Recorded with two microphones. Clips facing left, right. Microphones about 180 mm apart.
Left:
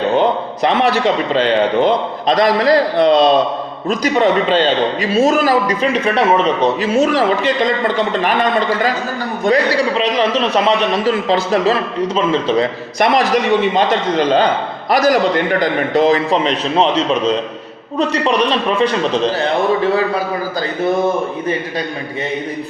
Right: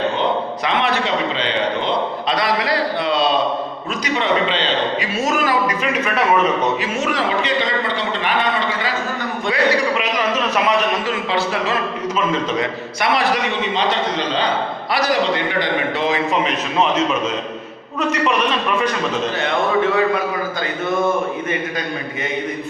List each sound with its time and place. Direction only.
0.6 s a man's voice: 40° left (ahead or behind)
5.1 s a man's voice: 35° left (ahead or behind)
8.2 s a man's voice: 45° left (ahead or behind)
9.9 s a man's voice: 30° left (ahead or behind)
13.7 s a man's voice: 50° left (ahead or behind)